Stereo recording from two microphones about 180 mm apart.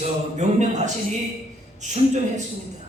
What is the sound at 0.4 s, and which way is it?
Speech, 40° right (ahead or behind).